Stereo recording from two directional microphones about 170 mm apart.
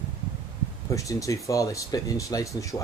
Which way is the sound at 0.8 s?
20° left (ahead or behind).